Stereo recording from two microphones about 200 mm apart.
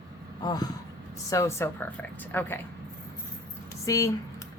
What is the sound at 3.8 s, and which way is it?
Speech, 15° left (ahead or behind).